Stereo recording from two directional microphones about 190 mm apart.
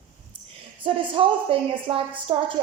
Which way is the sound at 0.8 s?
25° right (ahead or behind).